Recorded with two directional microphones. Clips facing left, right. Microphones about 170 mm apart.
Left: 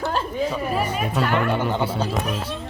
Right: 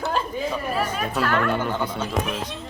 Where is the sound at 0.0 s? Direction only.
Centre (ahead or behind).